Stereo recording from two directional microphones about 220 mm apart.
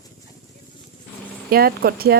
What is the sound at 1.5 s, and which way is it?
Speech, 45° right (ahead or behind).